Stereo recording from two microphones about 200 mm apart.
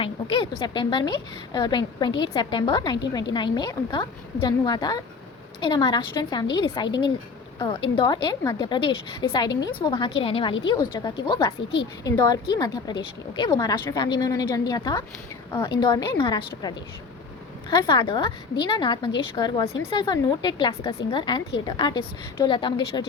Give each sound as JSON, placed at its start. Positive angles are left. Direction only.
{"t": 0.0, "sound": "a woman's voice", "side_deg": 25}